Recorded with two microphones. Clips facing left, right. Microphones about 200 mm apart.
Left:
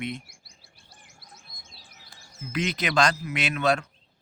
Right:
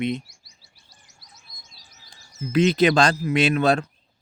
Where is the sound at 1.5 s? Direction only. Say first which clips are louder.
Even; 60° left (ahead or behind).